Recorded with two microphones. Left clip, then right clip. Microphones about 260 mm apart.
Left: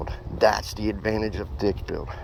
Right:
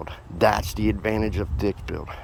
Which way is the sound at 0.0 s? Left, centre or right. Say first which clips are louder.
Even; centre.